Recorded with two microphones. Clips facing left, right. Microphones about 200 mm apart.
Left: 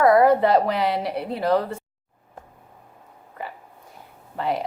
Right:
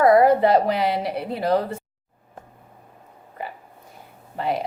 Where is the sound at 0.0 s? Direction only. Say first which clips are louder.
Right 1 dB; 30° right (ahead or behind).